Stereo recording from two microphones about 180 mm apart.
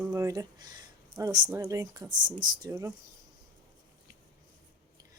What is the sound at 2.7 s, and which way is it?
Speech, 15° right (ahead or behind).